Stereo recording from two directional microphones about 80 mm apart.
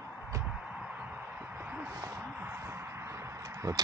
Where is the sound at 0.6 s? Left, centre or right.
Centre.